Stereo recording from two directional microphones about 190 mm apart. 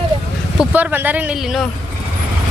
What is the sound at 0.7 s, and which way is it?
Speech, 10° right (ahead or behind).